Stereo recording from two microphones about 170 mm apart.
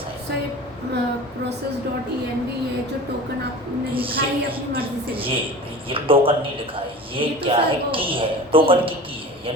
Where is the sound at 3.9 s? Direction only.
30° right (ahead or behind).